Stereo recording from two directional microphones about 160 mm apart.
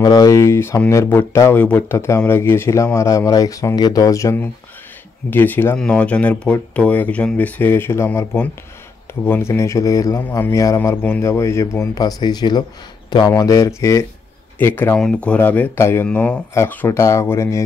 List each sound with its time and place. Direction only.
0.0 s a man's voice: 25° left (ahead or behind)